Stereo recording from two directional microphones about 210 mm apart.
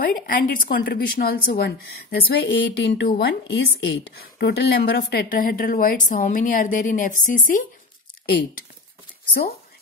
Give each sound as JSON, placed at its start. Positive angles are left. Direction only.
{"t": 0.0, "sound": "a woman's voice", "side_deg": 40}